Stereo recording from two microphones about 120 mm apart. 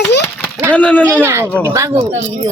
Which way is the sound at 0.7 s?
10° left (ahead or behind).